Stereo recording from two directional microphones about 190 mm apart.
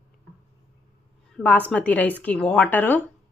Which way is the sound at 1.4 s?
5° left (ahead or behind).